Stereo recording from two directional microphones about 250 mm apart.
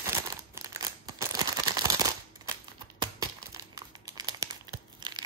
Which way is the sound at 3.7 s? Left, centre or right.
Centre.